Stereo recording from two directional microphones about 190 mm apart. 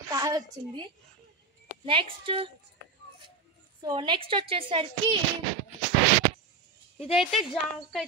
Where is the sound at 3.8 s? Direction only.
25° right (ahead or behind).